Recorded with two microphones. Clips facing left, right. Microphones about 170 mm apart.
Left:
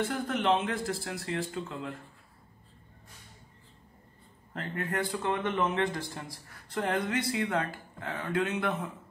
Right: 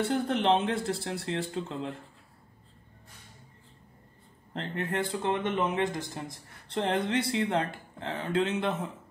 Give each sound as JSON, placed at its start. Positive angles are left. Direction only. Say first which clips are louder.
{"t": 0.0, "sound": "speech", "louder": "right 3 dB", "side_deg": -30}
{"t": 4.6, "sound": "speech", "louder": "right 1 dB", "side_deg": -25}